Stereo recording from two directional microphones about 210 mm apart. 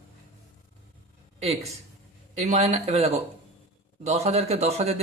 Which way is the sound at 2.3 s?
35° right (ahead or behind).